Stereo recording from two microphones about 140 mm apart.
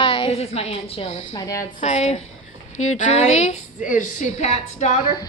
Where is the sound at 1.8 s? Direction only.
55° left (ahead or behind).